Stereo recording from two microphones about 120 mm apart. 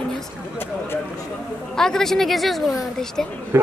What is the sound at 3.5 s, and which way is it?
Speech, 20° right (ahead or behind).